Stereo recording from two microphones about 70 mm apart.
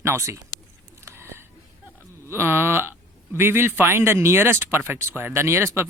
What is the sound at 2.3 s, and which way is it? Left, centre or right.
Speech, right.